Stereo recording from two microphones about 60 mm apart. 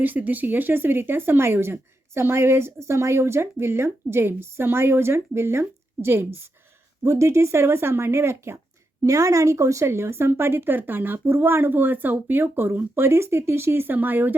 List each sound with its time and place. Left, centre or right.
0.0 s speech: right
7.0 s speech: right
9.0 s speech: right